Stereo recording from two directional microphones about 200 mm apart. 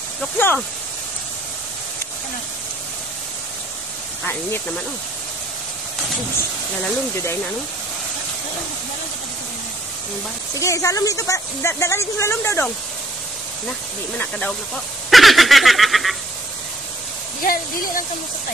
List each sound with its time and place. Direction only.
0.4 s speech: 10° left (ahead or behind)
4.2 s speech: 10° left (ahead or behind)
10.5 s speech: 15° left (ahead or behind)
14.1 s speech: 5° left (ahead or behind)
15.0 s snicker: centre (ahead or behind)
17.4 s speech: 45° left (ahead or behind)